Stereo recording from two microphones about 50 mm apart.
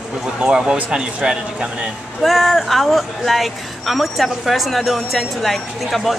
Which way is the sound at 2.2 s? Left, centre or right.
Centre.